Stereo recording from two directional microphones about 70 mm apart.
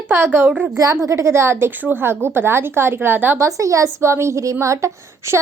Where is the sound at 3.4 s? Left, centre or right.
Right.